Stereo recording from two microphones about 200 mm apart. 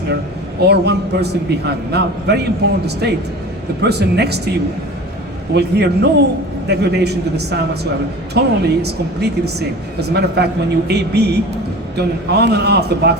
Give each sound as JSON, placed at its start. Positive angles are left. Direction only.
{"t": 0.6, "sound": "speech", "side_deg": -55}
{"t": 5.5, "sound": "speech", "side_deg": -55}